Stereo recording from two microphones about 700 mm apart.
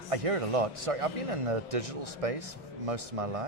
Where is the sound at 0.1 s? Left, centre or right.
Right.